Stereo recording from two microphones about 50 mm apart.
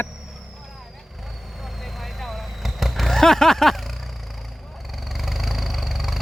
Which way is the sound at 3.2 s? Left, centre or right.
Centre.